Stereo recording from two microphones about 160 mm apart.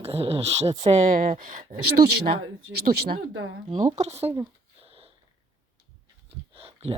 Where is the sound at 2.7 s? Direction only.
75° right (ahead or behind).